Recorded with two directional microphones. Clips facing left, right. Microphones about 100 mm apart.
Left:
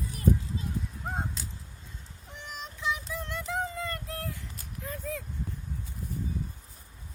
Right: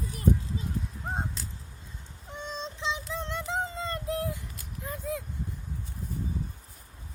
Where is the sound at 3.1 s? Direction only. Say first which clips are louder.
Right 2 dB; 25° right (ahead or behind).